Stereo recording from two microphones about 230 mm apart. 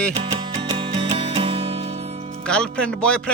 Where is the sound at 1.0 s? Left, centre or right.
Right.